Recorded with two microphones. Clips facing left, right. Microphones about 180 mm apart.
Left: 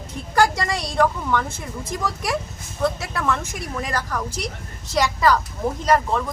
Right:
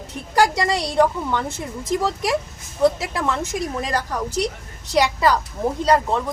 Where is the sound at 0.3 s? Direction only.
20° right (ahead or behind).